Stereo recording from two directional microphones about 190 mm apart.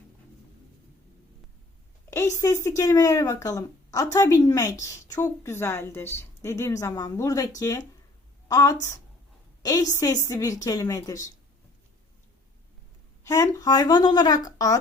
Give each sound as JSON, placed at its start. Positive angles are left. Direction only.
{"t": 2.0, "sound": "a woman's voice", "side_deg": 15}
{"t": 13.2, "sound": "a woman's voice", "side_deg": 15}